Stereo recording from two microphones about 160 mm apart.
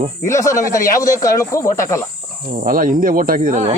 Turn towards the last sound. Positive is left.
turn(degrees=-55)  # may be behind; listen again after turning